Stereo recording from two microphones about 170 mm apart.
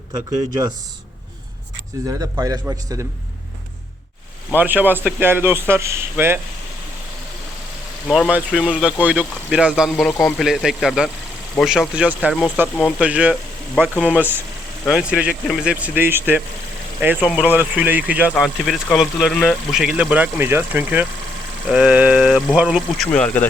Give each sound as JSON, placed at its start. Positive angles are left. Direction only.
{"t": 0.1, "sound": "a man's voice", "side_deg": -25}
{"t": 2.3, "sound": "a man's voice", "side_deg": -20}
{"t": 4.5, "sound": "a man's voice", "side_deg": -10}
{"t": 8.0, "sound": "a man's voice", "side_deg": 5}
{"t": 13.7, "sound": "speech", "side_deg": 5}
{"t": 14.2, "sound": "a man's voice", "side_deg": -10}
{"t": 23.1, "sound": "speech", "side_deg": 10}